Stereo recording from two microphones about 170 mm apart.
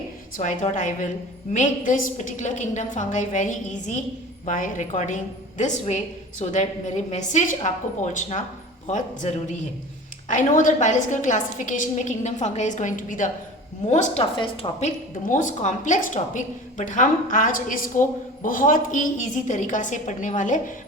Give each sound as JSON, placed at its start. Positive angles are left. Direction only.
{"t": 0.3, "sound": "a woman's voice", "side_deg": 45}